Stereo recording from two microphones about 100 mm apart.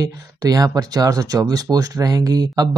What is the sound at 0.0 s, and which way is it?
Speech, 35° right (ahead or behind).